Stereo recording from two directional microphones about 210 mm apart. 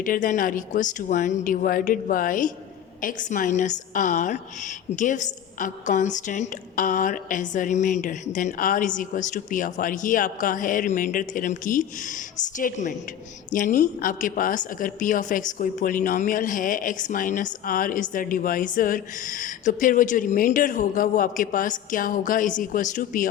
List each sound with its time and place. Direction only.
0.0 s a woman's voice: 40° left (ahead or behind)